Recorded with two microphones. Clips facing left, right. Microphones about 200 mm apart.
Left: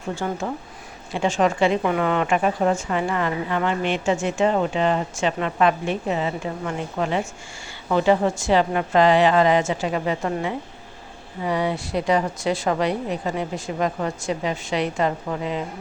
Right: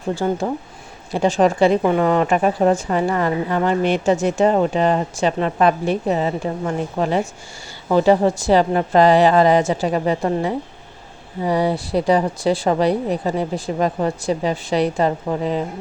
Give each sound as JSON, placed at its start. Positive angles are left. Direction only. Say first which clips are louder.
{"t": 0.2, "sound": "a woman's voice", "louder": "right 6 dB", "side_deg": -35}